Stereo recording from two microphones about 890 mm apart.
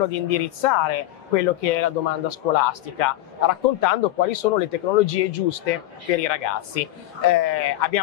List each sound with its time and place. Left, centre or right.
0.1 s speech: left